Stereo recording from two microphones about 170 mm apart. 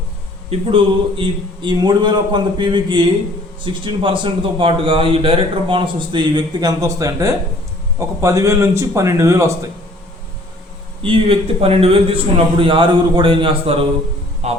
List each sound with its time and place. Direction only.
0.5 s a man's voice: 30° right (ahead or behind)
11.0 s a man's voice: 30° right (ahead or behind)